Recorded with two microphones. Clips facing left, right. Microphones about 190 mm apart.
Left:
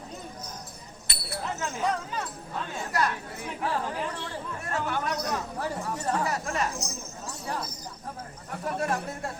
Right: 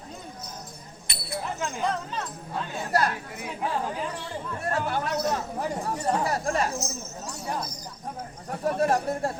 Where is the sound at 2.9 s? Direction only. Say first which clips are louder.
Right 3 dB; 35° right (ahead or behind).